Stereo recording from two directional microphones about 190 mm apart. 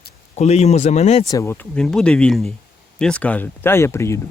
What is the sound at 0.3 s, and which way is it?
Speech, 35° left (ahead or behind).